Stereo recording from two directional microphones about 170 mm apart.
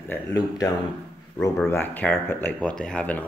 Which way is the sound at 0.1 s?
20° left (ahead or behind).